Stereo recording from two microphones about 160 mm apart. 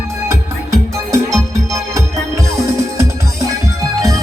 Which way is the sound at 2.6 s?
20° right (ahead or behind).